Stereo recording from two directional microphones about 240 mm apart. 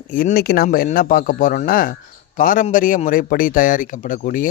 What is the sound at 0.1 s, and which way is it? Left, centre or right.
Speech, left.